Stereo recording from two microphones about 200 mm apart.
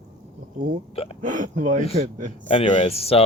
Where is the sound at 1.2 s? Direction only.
40° right (ahead or behind).